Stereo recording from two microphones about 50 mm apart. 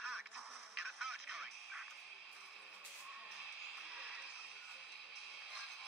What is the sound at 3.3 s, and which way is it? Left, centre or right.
Music, centre.